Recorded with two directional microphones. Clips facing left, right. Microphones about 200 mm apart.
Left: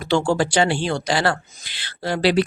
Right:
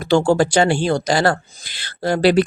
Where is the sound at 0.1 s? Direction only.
40° right (ahead or behind).